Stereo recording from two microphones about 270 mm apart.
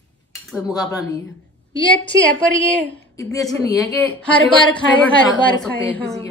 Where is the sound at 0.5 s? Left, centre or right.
Centre.